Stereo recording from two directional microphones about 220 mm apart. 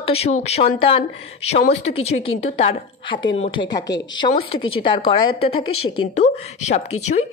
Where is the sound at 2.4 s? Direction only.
25° left (ahead or behind).